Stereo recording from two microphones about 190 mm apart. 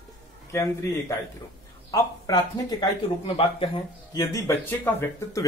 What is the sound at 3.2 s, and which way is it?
Speech, 30° left (ahead or behind).